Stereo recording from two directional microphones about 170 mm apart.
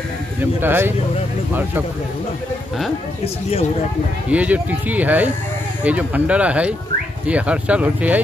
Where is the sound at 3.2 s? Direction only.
35° left (ahead or behind).